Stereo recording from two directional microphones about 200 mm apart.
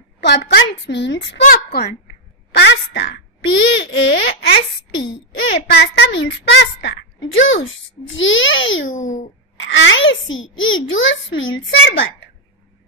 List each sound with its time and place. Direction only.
0.2 s a child's voice: 60° left (ahead or behind)
1.4 s a child's voice: 50° left (ahead or behind)
7.3 s a child's voice: 70° left (ahead or behind)